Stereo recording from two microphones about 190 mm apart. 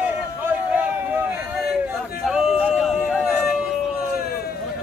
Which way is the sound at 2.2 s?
Centre (ahead or behind).